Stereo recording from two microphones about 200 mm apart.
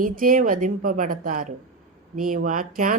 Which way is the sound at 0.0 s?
45° right (ahead or behind).